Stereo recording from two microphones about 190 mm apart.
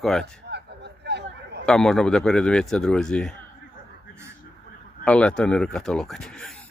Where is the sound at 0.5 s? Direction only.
60° right (ahead or behind).